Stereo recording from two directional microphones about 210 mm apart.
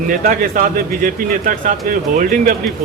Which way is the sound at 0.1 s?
40° right (ahead or behind).